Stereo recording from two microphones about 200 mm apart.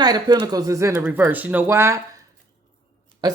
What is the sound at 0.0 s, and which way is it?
Speech, 20° right (ahead or behind).